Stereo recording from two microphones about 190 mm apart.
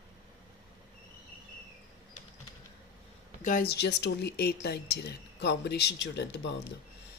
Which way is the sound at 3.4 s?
50° left (ahead or behind).